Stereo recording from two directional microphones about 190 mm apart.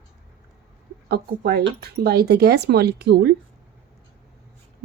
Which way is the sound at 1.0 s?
60° right (ahead or behind).